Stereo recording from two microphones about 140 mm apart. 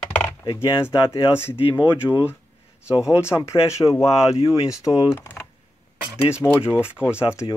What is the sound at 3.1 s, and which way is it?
Speech, 20° left (ahead or behind).